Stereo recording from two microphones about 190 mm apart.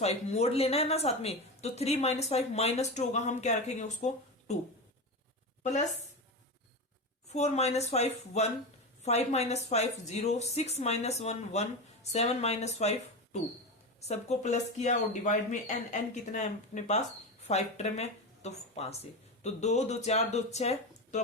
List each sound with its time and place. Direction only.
0.0 s a woman's voice: 35° left (ahead or behind)
7.3 s a woman's voice: 35° left (ahead or behind)